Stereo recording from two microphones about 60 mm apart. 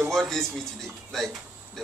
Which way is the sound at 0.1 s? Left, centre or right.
Centre.